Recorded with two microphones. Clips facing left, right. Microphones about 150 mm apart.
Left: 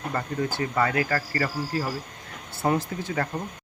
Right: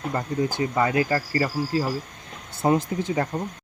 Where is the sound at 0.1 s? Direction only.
15° right (ahead or behind).